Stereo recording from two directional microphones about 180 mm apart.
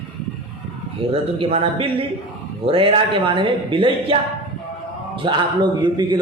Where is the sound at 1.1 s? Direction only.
35° right (ahead or behind).